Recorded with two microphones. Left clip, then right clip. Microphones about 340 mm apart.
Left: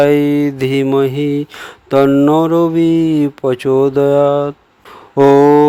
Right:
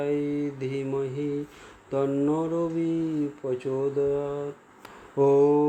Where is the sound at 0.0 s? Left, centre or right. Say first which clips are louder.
Left 16 dB; left.